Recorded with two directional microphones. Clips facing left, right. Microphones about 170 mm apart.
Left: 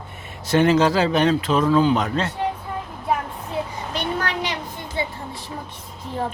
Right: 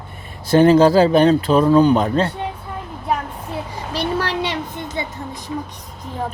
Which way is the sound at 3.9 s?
35° right (ahead or behind).